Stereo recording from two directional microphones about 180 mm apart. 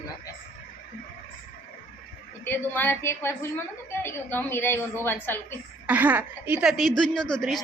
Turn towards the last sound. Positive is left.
turn(degrees=0)  # may be behind; listen again after turning